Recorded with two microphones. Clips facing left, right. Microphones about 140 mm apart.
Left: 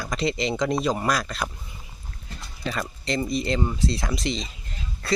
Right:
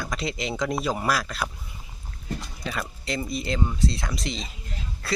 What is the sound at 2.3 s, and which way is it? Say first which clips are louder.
Speech: right 9 dB; 50° right (ahead or behind).